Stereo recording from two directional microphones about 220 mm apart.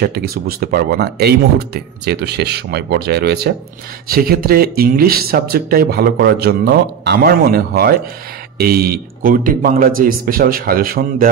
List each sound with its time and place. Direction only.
0.0 s speech: 45° right (ahead or behind)